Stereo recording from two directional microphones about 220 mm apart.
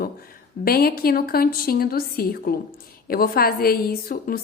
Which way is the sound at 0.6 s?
45° left (ahead or behind).